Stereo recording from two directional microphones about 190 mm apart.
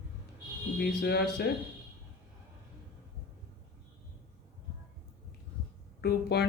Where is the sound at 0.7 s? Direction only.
60° left (ahead or behind).